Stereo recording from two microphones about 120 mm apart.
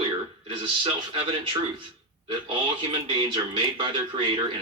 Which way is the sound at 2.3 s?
45° right (ahead or behind).